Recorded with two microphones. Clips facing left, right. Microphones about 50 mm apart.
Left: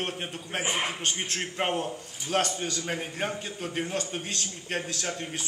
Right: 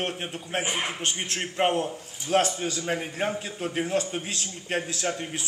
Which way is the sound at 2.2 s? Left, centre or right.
Right.